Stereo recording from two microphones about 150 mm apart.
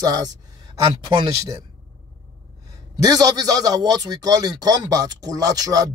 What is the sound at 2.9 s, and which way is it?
A man's voice, 25° right (ahead or behind).